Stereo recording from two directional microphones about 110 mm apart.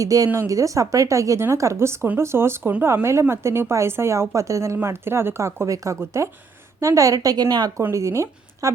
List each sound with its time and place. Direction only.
0.0 s a woman's voice: 30° right (ahead or behind)
7.8 s speech: 25° right (ahead or behind)